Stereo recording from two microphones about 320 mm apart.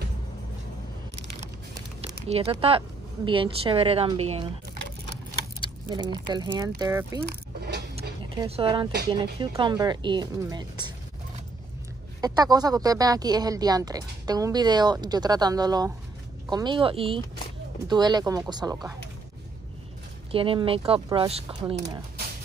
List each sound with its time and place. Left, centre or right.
2.2 s speech: centre
5.6 s speech: centre
7.2 s mechanisms: right
8.4 s speech: centre
12.2 s speech: centre
20.2 s speech: centre